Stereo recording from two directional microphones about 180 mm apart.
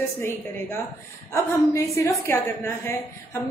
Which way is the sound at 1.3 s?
15° left (ahead or behind).